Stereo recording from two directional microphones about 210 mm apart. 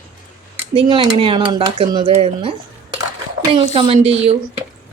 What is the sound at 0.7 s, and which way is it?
Speech, 25° right (ahead or behind).